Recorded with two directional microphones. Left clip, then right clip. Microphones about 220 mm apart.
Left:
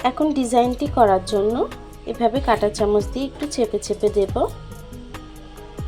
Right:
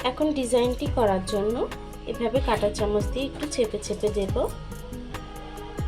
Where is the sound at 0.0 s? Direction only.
30° left (ahead or behind).